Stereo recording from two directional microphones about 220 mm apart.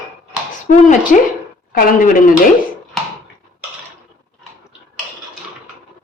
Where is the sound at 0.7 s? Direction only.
35° left (ahead or behind).